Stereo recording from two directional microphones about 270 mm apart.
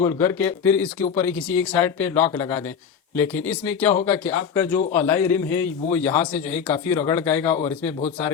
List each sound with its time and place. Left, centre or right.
0.0 s a man's voice: centre